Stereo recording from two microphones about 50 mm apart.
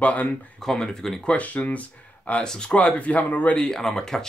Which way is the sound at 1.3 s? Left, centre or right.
Left.